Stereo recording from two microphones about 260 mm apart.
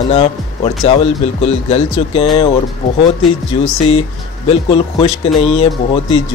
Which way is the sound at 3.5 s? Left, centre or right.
Centre.